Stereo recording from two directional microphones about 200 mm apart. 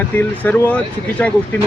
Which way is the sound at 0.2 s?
10° left (ahead or behind).